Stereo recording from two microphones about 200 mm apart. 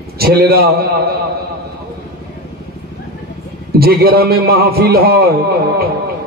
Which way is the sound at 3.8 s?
50° right (ahead or behind).